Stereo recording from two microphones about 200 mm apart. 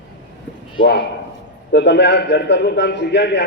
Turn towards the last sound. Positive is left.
turn(degrees=60)  # may be behind; listen again after turning